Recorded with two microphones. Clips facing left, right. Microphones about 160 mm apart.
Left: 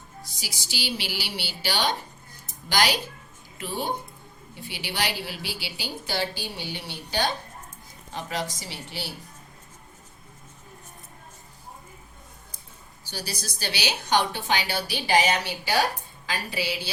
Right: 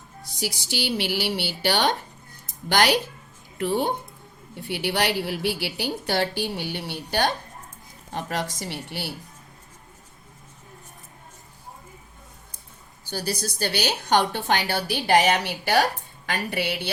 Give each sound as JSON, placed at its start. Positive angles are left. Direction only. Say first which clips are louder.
{"t": 0.3, "sound": "a woman's voice", "louder": "right 8 dB", "side_deg": -55}
{"t": 13.1, "sound": "a woman's voice", "louder": "right 7 dB", "side_deg": -50}